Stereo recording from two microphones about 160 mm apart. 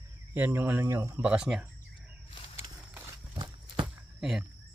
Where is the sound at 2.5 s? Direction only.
15° right (ahead or behind).